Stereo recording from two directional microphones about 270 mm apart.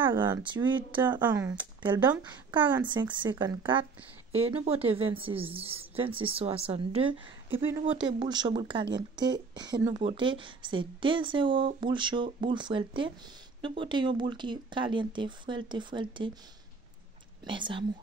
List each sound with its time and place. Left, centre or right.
0.0 s a woman's voice: centre
2.9 s a woman's voice: centre
17.5 s a woman's voice: centre